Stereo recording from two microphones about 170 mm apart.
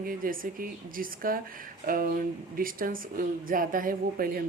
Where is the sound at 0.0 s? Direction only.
55° right (ahead or behind).